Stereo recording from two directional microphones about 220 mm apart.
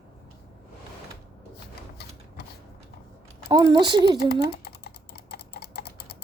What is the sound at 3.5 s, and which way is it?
Speech, 20° right (ahead or behind).